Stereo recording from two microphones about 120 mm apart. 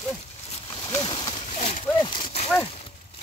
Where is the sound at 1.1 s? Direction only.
55° left (ahead or behind).